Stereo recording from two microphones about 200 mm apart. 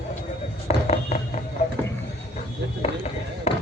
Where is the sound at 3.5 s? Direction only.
35° left (ahead or behind).